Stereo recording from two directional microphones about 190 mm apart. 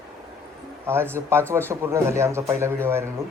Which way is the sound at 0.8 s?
10° right (ahead or behind).